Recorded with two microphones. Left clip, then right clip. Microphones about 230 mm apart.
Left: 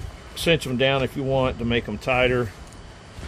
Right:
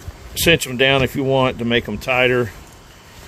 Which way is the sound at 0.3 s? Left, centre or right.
Right.